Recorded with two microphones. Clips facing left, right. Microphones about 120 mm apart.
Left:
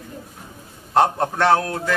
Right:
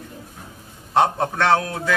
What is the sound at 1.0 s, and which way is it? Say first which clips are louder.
Speech: left 1 dB; centre (ahead or behind).